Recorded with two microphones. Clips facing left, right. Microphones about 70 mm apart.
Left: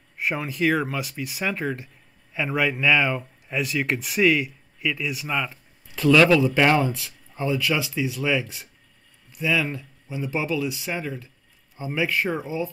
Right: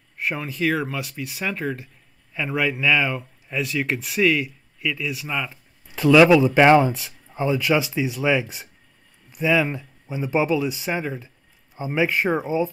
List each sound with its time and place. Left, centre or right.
0.2 s speech: centre
5.9 s speech: centre